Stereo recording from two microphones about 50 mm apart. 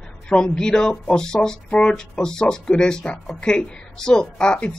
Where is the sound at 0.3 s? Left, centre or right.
Centre.